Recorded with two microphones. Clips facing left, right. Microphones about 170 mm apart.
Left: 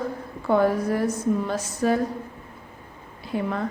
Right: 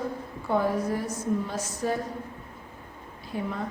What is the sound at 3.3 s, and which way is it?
Speech, 70° left (ahead or behind).